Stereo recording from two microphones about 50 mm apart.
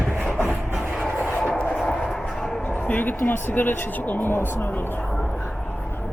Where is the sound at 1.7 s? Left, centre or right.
Centre; by 5.0 s left.